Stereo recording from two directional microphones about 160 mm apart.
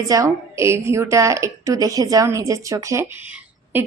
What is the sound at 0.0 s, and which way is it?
A woman's voice, 20° right (ahead or behind).